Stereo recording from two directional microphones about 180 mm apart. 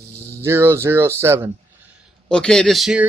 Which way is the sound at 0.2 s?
15° right (ahead or behind).